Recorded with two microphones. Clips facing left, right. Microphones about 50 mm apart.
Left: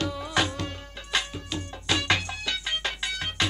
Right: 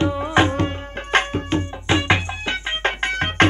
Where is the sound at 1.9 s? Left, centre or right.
Right.